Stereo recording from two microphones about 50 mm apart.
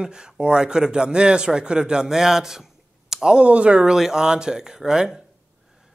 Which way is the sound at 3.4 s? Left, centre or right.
Right.